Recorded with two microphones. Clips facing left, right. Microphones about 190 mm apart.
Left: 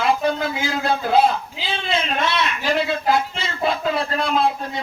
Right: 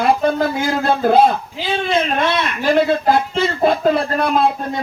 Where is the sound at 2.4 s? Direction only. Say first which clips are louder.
Right 6 dB; 50° right (ahead or behind).